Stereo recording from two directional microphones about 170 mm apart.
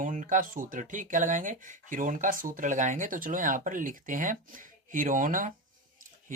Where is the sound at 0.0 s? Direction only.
50° right (ahead or behind).